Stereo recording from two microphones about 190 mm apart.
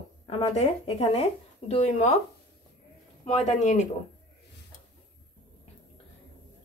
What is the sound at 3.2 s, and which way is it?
Speech, 35° left (ahead or behind).